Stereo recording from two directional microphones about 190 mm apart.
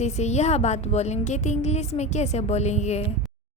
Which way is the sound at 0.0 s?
35° left (ahead or behind).